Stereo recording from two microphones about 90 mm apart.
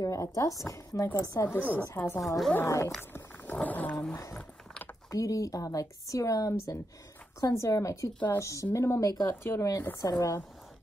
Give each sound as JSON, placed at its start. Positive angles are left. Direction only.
{"t": 0.0, "sound": "speech", "side_deg": 40}
{"t": 1.6, "sound": "a woman's voice", "side_deg": -20}
{"t": 2.0, "sound": "speech", "side_deg": 30}
{"t": 3.0, "sound": "a sound", "side_deg": 25}
{"t": 3.5, "sound": "speech", "side_deg": 20}
{"t": 4.1, "sound": "speech", "side_deg": 35}